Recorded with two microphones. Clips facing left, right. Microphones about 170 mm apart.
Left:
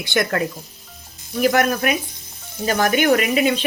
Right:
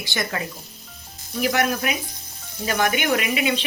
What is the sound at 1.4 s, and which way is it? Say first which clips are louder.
Speech: left 5 dB; 45° left (ahead or behind).